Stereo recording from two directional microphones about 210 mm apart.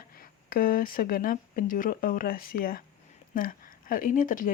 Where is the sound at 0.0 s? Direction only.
45° left (ahead or behind).